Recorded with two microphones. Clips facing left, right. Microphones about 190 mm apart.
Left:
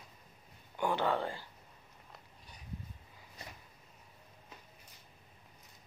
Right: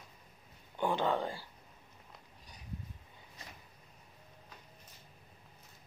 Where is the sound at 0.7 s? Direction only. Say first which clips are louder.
Even; 20° right (ahead or behind).